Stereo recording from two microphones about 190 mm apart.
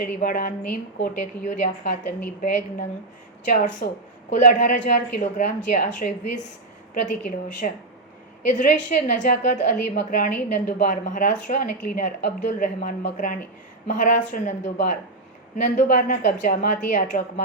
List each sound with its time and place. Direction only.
0.0 s a woman's voice: 45° left (ahead or behind)